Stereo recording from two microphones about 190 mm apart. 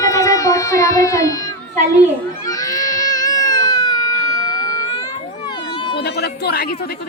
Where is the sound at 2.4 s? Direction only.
20° left (ahead or behind).